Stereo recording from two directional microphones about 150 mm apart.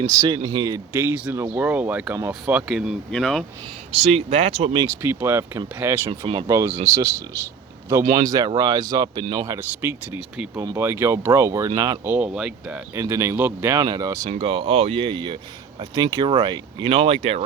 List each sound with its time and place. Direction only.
0.1 s speech: 20° right (ahead or behind)
0.9 s speech: 15° right (ahead or behind)
2.6 s speech: 5° right (ahead or behind)
3.9 s speech: 40° right (ahead or behind)
5.0 s speech: 15° right (ahead or behind)
6.1 s speech: 35° right (ahead or behind)
6.5 s speech: 20° right (ahead or behind)
9.5 s speech: 15° right (ahead or behind)
10.2 s speech: 5° right (ahead or behind)
10.5 s speech: 20° right (ahead or behind)
12.0 s speech: 10° right (ahead or behind)
14.3 s speech: 40° right (ahead or behind)